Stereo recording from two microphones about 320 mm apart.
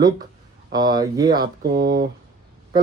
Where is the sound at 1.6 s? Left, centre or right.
Right.